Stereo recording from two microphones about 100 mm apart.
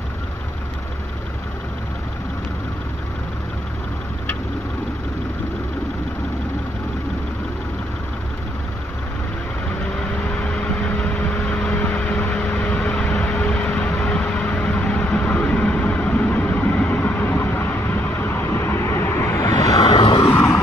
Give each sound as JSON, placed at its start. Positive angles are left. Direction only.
{"t": 10.3, "sound": "vehicle", "side_deg": 15}
{"t": 19.8, "sound": "vehicle", "side_deg": 50}